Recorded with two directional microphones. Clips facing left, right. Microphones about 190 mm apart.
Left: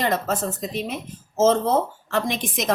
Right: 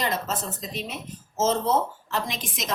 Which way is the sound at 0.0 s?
50° left (ahead or behind).